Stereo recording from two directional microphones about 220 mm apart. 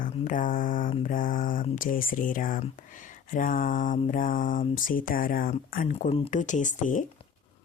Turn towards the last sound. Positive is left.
turn(degrees=35)  # may be behind; listen again after turning